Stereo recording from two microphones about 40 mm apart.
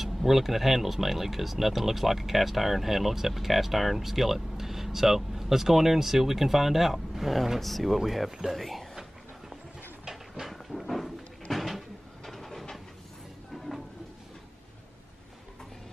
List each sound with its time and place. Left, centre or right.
0.0 s speech: centre
10.0 s a sound: centre
10.5 s cupboard open or close: centre
12.3 s vehicle: centre